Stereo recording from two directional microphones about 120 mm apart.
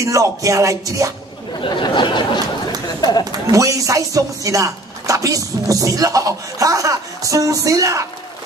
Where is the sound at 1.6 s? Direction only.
40° left (ahead or behind).